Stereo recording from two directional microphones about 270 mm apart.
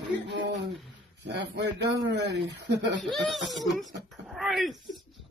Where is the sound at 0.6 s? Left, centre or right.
Centre.